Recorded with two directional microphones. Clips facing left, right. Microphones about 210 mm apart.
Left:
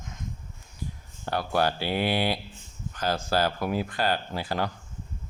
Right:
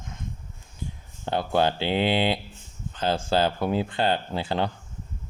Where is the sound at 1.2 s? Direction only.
20° right (ahead or behind).